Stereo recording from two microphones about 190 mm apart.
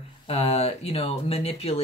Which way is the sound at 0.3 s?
30° left (ahead or behind).